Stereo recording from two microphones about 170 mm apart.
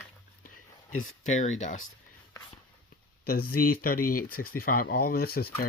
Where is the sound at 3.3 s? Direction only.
60° left (ahead or behind).